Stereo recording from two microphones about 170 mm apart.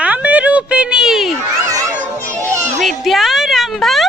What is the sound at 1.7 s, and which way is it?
Children playing, 20° right (ahead or behind).